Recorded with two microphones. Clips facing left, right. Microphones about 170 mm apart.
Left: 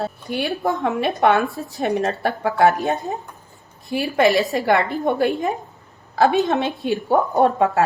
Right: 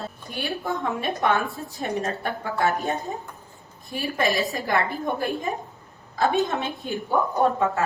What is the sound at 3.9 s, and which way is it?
A woman's voice, 80° left.